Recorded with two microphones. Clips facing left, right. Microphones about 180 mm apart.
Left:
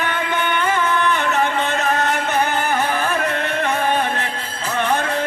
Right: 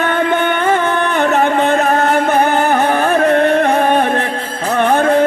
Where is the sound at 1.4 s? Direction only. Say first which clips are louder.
Right 7 dB; 40° right (ahead or behind).